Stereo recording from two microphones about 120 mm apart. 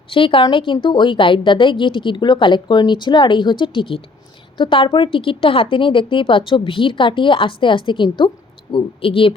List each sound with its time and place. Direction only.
0.1 s speech: 45° left (ahead or behind)